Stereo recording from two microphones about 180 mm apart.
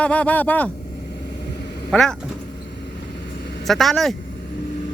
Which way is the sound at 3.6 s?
Centre (ahead or behind).